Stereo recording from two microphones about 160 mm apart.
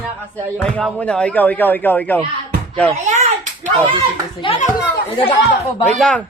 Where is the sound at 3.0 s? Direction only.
45° right (ahead or behind).